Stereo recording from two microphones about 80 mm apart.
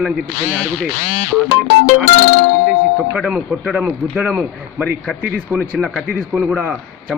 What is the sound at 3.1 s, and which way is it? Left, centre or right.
A man's voice, centre.